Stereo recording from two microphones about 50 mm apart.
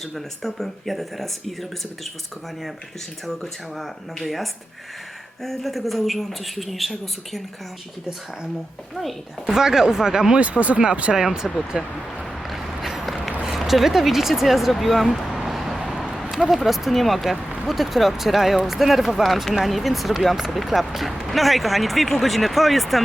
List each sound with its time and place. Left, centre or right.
0.4 s speech: centre
3.2 s speech: centre
9.5 s speech: centre
10.4 s speech: right
11.1 s speech: centre
11.7 s a sound: centre
13.4 s speech: centre
15.4 s vehicle: centre
15.9 s a sound: centre
16.5 s speech: centre